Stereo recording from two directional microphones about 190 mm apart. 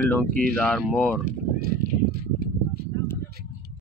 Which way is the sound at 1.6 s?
50° right (ahead or behind).